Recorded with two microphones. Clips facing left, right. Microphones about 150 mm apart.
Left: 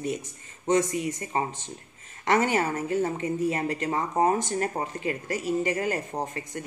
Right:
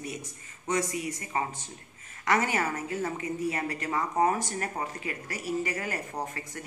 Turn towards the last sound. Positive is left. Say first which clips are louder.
# left 4 dB
turn(degrees=25)  # may be behind; listen again after turning